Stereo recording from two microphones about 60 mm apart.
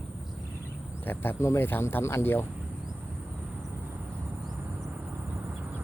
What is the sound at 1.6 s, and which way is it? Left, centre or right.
Speech, left.